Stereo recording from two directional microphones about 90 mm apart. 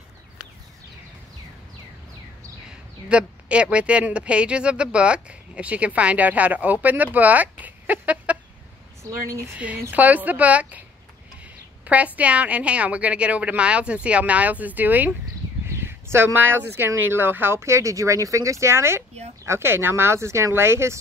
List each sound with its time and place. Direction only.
3.1 s speech: 10° right (ahead or behind)
7.6 s a sound: 20° right (ahead or behind)
9.8 s speech: 15° right (ahead or behind)
11.8 s speech: 15° right (ahead or behind)